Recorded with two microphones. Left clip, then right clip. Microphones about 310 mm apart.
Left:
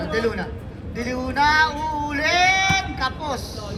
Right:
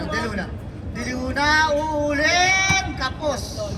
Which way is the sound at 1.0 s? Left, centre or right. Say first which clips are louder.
Left 3 dB; centre.